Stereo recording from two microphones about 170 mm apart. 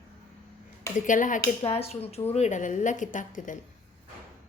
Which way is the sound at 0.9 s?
50° left (ahead or behind).